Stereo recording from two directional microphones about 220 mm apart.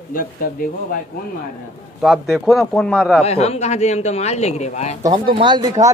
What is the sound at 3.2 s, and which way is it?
Speech, 30° left (ahead or behind).